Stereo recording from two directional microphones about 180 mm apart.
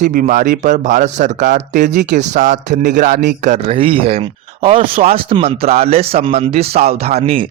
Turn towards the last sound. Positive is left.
turn(degrees=-30)  # may be behind; listen again after turning